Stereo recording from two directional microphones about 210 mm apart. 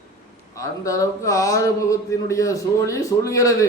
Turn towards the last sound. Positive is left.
turn(degrees=15)  # may be behind; listen again after turning